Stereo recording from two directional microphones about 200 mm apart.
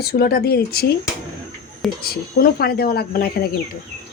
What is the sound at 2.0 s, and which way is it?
A woman's voice, 50° left (ahead or behind).